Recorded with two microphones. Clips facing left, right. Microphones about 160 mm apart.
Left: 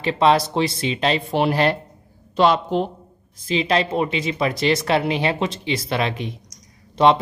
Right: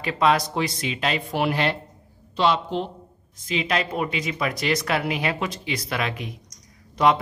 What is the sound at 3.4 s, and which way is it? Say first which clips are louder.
Speech: left 5 dB; 30° left (ahead or behind).